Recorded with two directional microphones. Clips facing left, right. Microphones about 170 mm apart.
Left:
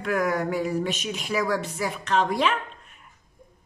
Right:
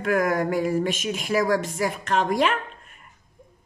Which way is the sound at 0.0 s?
50° right (ahead or behind).